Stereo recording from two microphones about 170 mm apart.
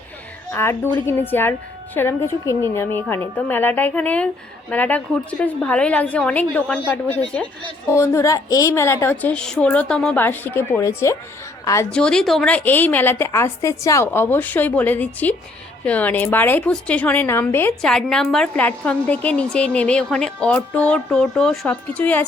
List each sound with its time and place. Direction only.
0.5 s a woman's voice: 15° left (ahead or behind)
11.9 s a woman's voice: 5° left (ahead or behind)